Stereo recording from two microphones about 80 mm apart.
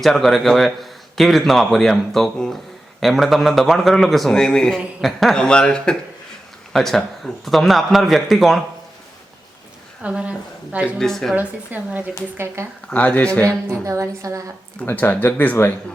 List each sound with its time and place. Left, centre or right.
0.0 s a man's voice: centre
10.0 s a woman's voice: centre
11.0 s a man's voice: centre
11.3 s a woman's voice: right
12.6 s a woman's voice: right
12.9 s speech: centre
13.7 s a woman's voice: right
14.8 s speech: left